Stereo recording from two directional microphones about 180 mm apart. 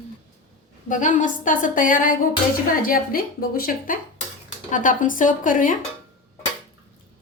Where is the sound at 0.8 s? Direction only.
45° left (ahead or behind).